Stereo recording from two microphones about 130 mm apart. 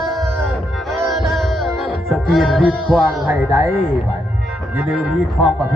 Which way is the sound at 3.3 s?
15° right (ahead or behind).